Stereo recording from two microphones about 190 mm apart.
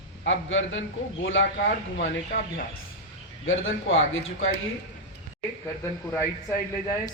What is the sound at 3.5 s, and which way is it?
A man's voice, 90° left.